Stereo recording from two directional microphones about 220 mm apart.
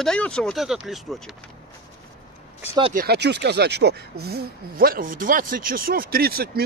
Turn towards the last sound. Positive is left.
turn(degrees=-45)  # may be behind; listen again after turning